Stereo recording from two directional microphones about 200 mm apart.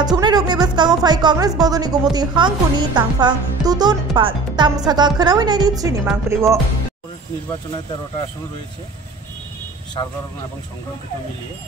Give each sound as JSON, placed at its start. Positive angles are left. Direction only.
{"t": 0.0, "sound": "speech", "side_deg": -20}